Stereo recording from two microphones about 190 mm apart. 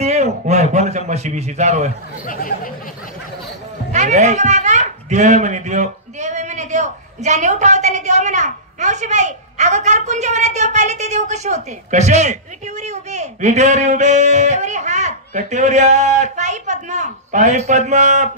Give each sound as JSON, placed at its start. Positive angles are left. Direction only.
{"t": 0.0, "sound": "a man's voice", "side_deg": -35}
{"t": 2.2, "sound": "speech", "side_deg": 45}
{"t": 3.9, "sound": "a child's voice", "side_deg": -40}